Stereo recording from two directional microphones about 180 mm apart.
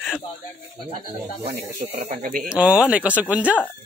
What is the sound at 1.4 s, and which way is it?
Speech, 35° right (ahead or behind).